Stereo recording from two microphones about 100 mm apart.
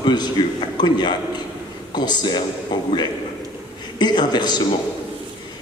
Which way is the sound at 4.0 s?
45° left (ahead or behind).